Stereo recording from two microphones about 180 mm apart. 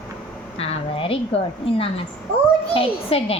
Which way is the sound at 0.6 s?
30° left (ahead or behind).